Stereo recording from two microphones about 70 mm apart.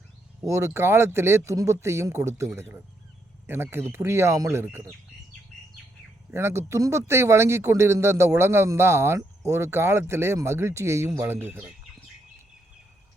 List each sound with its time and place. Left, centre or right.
0.4 s speech: right
2.6 s speech: right
4.6 s speech: right
6.3 s speech: right
11.3 s speech: right